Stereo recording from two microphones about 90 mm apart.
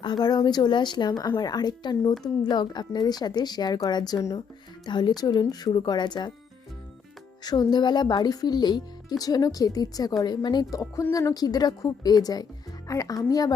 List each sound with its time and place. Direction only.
0.0 s speech: 55° left (ahead or behind)
4.9 s speech: 55° left (ahead or behind)
7.4 s speech: 50° left (ahead or behind)
10.7 s a woman's voice: 40° left (ahead or behind)